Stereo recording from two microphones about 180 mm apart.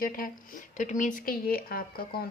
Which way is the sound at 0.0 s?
50° left (ahead or behind).